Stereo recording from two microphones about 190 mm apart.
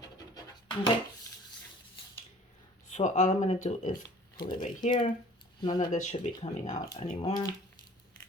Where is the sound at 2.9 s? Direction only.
40° left (ahead or behind).